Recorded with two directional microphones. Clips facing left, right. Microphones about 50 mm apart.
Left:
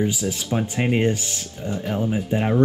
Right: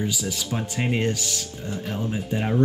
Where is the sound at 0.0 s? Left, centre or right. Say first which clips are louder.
Left 4 dB; left.